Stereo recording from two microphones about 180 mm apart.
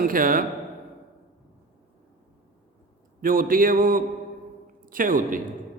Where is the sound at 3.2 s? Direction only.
50° right (ahead or behind).